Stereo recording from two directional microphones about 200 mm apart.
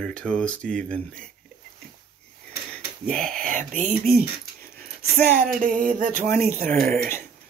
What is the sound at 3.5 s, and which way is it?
Speech, 40° right (ahead or behind).